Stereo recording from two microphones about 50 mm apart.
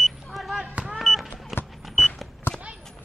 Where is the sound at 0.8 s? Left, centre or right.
Centre.